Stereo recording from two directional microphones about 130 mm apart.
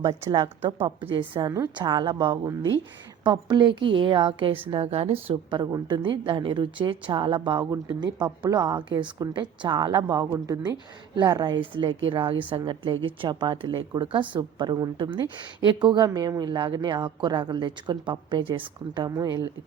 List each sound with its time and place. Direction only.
0.0 s a woman's voice: 25° right (ahead or behind)
0.3 s a woman's voice: 40° right (ahead or behind)